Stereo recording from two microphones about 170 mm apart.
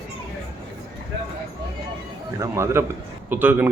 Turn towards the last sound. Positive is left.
turn(degrees=-10)  # may be behind; listen again after turning